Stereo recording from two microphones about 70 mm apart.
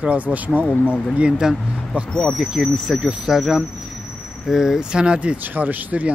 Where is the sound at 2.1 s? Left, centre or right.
Centre.